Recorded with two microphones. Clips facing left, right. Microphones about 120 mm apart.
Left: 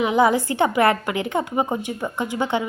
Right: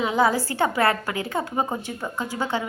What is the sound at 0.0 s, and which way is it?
A woman's voice, 20° left (ahead or behind).